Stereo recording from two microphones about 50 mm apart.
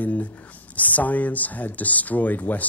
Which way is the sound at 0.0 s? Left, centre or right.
Left.